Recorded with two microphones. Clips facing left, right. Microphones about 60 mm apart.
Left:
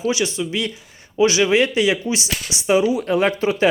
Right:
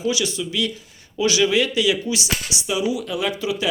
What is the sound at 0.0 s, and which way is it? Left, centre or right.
Speech, left.